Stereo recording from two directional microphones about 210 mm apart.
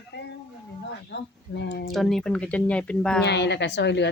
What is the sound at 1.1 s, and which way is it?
Speech, 55° left (ahead or behind).